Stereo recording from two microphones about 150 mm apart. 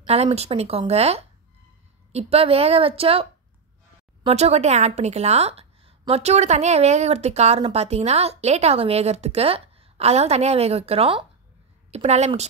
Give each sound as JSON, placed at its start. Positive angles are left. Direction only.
{"t": 0.0, "sound": "a woman's voice", "side_deg": -45}
{"t": 4.3, "sound": "a woman's voice", "side_deg": -45}